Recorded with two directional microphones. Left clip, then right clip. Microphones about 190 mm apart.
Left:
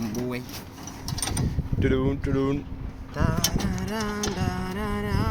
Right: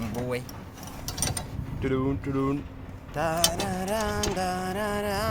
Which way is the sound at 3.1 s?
40° right (ahead or behind).